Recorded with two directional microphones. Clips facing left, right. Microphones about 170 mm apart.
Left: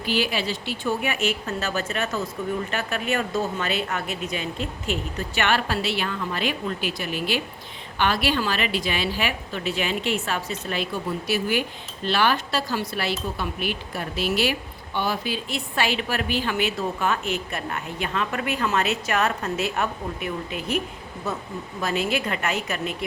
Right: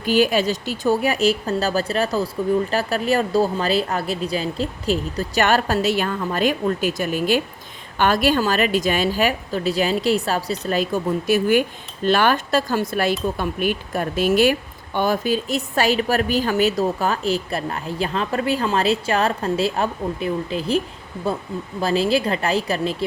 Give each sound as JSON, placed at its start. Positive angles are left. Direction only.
{"t": 0.0, "sound": "a woman's voice", "side_deg": -45}